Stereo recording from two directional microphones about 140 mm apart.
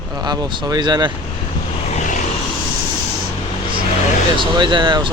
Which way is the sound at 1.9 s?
60° left (ahead or behind).